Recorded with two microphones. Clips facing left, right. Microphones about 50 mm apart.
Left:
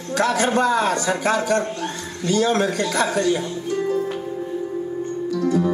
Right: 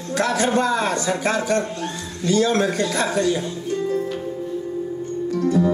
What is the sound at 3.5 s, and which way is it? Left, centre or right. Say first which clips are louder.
Music: left 1 dB; left.